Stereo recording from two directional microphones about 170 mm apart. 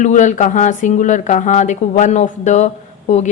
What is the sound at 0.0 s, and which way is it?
A woman's voice, 45° left (ahead or behind).